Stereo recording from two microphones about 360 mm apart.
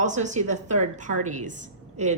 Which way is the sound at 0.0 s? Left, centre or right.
Centre.